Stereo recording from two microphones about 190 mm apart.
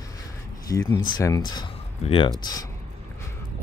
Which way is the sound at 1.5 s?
25° left (ahead or behind).